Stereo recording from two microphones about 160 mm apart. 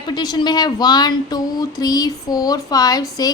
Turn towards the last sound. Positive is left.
turn(degrees=25)  # may be behind; listen again after turning